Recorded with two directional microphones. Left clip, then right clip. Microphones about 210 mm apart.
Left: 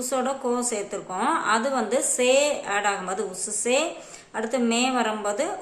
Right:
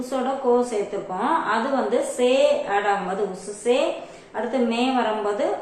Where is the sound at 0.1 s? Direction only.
30° left (ahead or behind).